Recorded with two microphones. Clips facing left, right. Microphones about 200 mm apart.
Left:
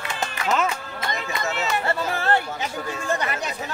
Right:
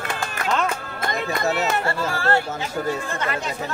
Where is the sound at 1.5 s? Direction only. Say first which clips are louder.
Right 1 dB; 40° right (ahead or behind).